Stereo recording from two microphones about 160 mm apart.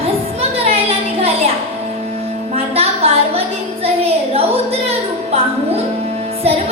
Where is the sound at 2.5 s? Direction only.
40° right (ahead or behind).